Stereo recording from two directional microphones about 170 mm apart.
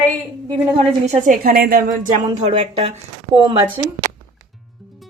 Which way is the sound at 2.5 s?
30° right (ahead or behind).